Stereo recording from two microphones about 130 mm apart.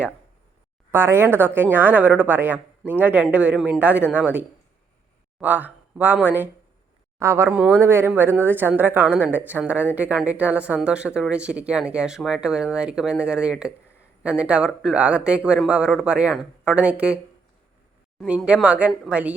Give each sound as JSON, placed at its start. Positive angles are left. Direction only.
{"t": 0.9, "sound": "a woman's voice", "side_deg": -20}
{"t": 18.3, "sound": "a woman's voice", "side_deg": -10}